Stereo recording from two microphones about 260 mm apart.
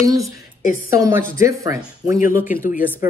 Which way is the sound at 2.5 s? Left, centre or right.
Left.